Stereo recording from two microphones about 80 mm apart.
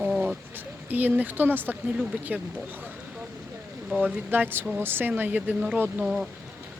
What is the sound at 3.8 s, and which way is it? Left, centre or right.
Speech, centre.